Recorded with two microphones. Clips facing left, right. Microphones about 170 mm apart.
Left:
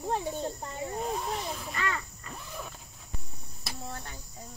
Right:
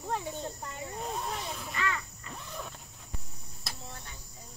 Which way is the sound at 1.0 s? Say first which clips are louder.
Left 1 dB; centre (ahead or behind).